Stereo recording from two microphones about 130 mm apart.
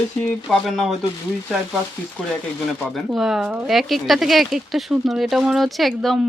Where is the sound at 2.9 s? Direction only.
5° right (ahead or behind).